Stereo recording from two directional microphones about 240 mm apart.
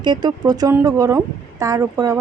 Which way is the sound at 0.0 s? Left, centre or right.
Centre.